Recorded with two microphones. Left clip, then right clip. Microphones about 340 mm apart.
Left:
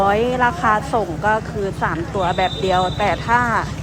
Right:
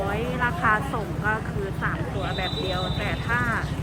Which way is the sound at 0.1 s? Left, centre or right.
Centre.